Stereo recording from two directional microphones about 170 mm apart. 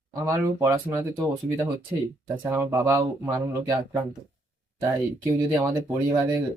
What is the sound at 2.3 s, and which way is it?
Speech, 10° right (ahead or behind).